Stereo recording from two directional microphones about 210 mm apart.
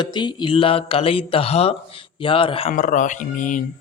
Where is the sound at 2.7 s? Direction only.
40° left (ahead or behind).